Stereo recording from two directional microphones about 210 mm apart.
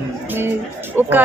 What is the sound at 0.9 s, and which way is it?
Speech, 10° right (ahead or behind).